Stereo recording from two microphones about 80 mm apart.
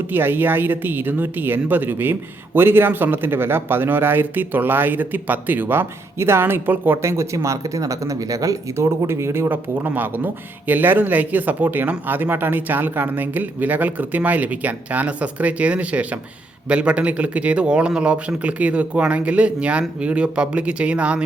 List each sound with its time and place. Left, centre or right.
0.1 s speech: right